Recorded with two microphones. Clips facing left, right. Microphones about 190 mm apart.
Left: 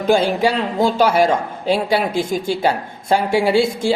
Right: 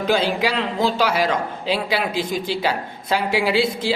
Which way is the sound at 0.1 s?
50° left (ahead or behind).